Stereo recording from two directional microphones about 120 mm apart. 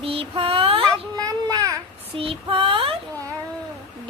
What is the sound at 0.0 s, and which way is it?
Child singing, 50° right (ahead or behind).